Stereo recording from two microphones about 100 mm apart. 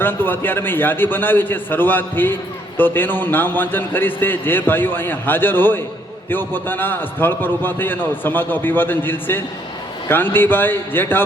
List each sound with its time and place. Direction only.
0.0 s a man's voice: 20° left (ahead or behind)